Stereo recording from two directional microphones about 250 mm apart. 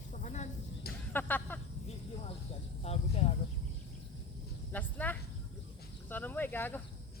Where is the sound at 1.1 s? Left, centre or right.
Centre.